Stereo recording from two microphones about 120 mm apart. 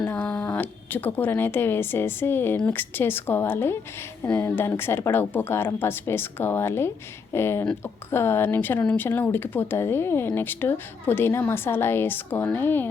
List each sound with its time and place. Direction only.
0.1 s a woman's voice: 10° left (ahead or behind)